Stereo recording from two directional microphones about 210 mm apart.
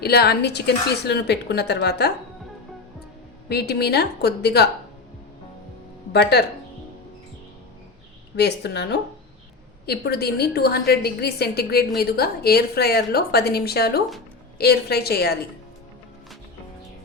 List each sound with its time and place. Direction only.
0.0 s a woman's voice: 50° left (ahead or behind)
3.5 s a woman's voice: 50° left (ahead or behind)
6.3 s a woman's voice: 50° left (ahead or behind)
8.4 s a woman's voice: 50° left (ahead or behind)